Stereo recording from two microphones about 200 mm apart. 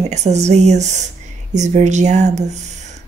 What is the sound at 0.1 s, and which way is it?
Speech, 35° right (ahead or behind).